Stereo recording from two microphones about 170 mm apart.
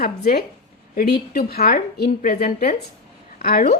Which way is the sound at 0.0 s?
65° left (ahead or behind).